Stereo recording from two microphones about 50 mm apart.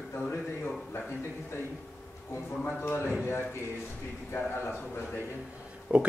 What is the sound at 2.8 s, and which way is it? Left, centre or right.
Speech, left.